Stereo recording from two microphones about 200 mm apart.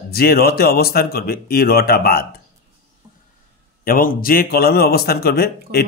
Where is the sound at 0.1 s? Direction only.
50° left (ahead or behind).